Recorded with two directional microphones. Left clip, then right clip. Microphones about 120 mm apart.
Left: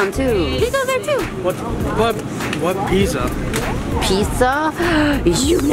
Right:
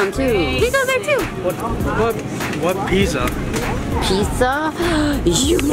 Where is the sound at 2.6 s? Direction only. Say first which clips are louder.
Even; 5° left (ahead or behind).